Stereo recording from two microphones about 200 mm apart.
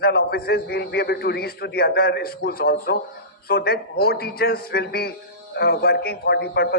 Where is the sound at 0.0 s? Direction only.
50° left (ahead or behind).